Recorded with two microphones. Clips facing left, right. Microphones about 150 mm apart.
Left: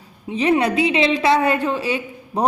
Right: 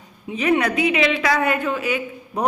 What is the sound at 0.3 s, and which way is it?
A woman's voice, 30° left (ahead or behind).